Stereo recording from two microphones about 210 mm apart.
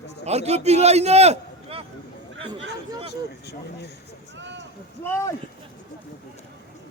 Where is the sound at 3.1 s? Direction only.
50° left (ahead or behind).